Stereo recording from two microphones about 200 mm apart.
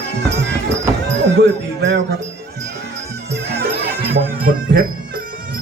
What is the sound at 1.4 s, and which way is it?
Music, 55° right (ahead or behind).